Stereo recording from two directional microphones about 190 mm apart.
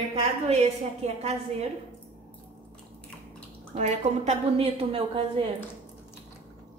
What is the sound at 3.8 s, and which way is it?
A woman's voice, 35° right (ahead or behind).